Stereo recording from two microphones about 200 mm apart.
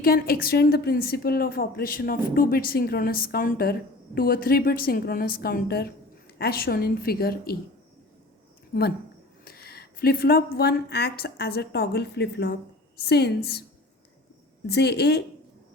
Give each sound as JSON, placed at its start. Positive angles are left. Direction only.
{"t": 0.0, "sound": "a woman's voice", "side_deg": 50}
{"t": 9.4, "sound": "a woman's voice", "side_deg": 50}
{"t": 14.7, "sound": "a woman's voice", "side_deg": 55}